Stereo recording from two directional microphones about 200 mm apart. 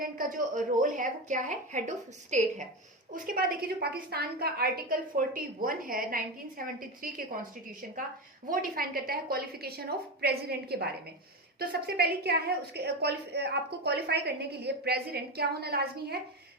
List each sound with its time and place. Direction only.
0.0 s a woman's voice: 45° right (ahead or behind)
3.1 s a woman's voice: 50° right (ahead or behind)